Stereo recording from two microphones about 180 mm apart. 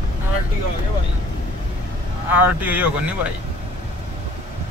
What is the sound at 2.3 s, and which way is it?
Speech, 10° right (ahead or behind).